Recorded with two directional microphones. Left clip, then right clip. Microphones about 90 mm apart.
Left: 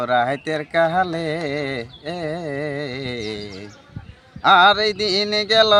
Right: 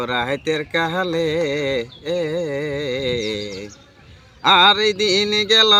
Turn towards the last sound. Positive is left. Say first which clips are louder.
# right 1 dB
turn(degrees=40)  # may be behind; listen again after turning